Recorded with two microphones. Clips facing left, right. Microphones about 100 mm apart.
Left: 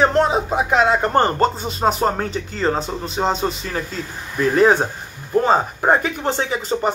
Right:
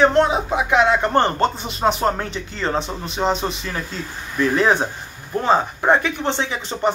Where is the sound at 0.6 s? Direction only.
40° left (ahead or behind).